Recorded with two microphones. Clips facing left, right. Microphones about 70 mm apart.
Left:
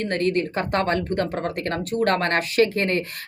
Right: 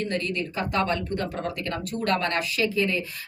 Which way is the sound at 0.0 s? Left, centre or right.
Left.